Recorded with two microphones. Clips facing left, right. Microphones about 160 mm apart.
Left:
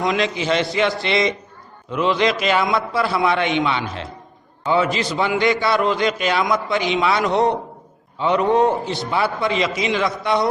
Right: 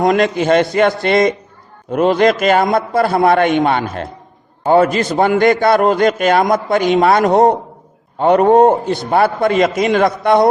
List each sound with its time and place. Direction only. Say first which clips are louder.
0.0 s a man's voice: right 7 dB; 50° right (ahead or behind)